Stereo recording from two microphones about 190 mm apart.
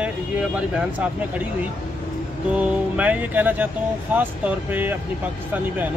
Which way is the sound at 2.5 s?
5° right (ahead or behind).